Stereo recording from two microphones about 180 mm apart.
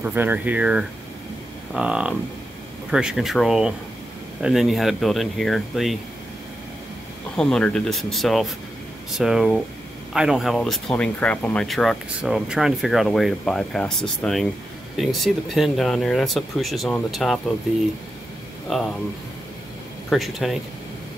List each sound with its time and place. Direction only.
0.0 s speech: 10° right (ahead or behind)
7.3 s speech: 5° left (ahead or behind)
18.7 s speech: centre (ahead or behind)
20.1 s speech: centre (ahead or behind)